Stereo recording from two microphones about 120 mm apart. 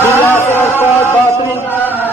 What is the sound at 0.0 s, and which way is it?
Music, 20° left (ahead or behind).